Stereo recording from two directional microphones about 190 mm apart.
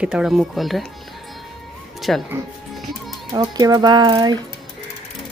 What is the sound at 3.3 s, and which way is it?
A woman's voice, 20° right (ahead or behind).